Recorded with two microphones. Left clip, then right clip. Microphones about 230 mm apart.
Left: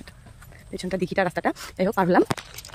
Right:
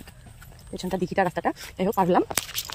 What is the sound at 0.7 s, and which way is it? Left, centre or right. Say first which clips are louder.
Speech: even; centre.